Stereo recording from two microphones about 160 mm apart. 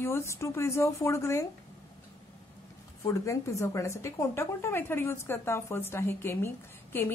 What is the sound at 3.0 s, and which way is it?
A woman's voice, 20° left (ahead or behind).